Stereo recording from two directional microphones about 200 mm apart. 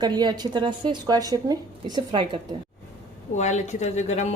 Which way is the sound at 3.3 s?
35° left (ahead or behind).